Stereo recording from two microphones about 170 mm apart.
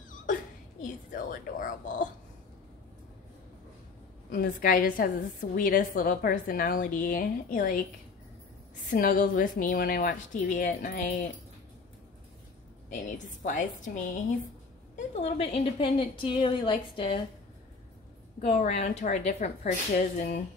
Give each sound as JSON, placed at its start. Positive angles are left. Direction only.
{"t": 0.3, "sound": "a sound", "side_deg": 55}
{"t": 4.3, "sound": "a woman's voice", "side_deg": 60}
{"t": 8.9, "sound": "a woman's voice", "side_deg": 55}
{"t": 12.9, "sound": "a woman's voice", "side_deg": 50}
{"t": 18.4, "sound": "a woman's voice", "side_deg": 45}